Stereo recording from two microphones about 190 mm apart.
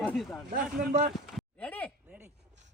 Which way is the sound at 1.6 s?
5° left (ahead or behind).